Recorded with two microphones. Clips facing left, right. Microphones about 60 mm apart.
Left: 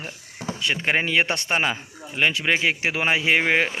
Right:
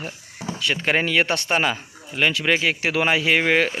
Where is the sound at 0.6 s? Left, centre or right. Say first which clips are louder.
Right 1 dB; centre.